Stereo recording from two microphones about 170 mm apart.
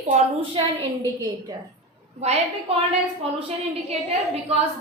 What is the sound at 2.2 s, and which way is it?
Speech, 40° right (ahead or behind).